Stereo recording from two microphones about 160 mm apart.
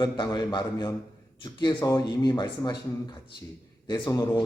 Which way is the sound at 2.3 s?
30° left (ahead or behind).